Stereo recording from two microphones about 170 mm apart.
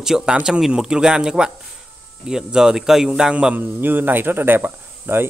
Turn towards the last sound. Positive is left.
turn(degrees=-15)  # may be behind; listen again after turning